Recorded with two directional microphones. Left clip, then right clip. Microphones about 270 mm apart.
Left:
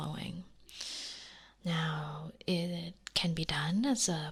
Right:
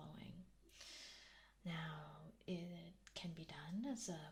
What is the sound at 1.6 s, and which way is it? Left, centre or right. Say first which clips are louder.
Speech: left 15 dB; left.